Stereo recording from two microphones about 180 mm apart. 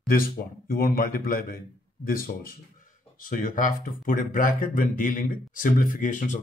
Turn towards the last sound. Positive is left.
turn(degrees=45)  # may be behind; listen again after turning